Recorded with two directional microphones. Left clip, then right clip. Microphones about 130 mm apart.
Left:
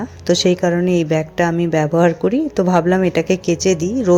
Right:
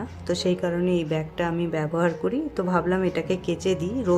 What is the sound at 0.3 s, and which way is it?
Speech, 40° left (ahead or behind).